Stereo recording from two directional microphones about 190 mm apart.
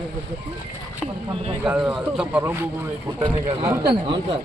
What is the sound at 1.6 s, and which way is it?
Speech, 10° right (ahead or behind).